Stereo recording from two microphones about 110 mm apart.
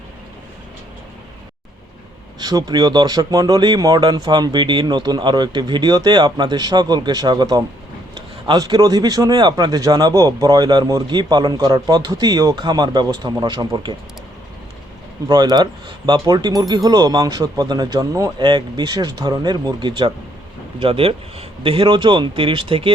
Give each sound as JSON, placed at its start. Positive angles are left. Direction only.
{"t": 2.4, "sound": "speech", "side_deg": -40}
{"t": 15.3, "sound": "speech", "side_deg": -40}
{"t": 18.3, "sound": "speech", "side_deg": -45}